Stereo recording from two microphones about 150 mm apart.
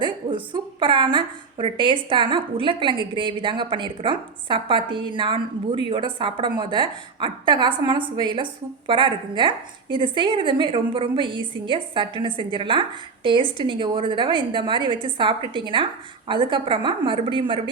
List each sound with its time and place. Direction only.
0.0 s a woman's voice: 35° right (ahead or behind)